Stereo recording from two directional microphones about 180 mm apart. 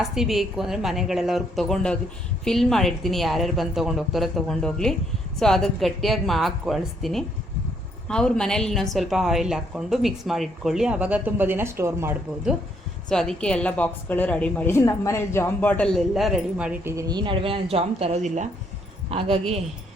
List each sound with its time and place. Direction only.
0.0 s a woman's voice: centre (ahead or behind)
13.1 s a woman's voice: 5° left (ahead or behind)
17.0 s a woman's voice: 25° right (ahead or behind)